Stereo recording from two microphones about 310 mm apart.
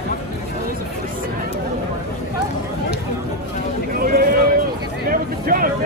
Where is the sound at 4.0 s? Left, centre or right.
Right.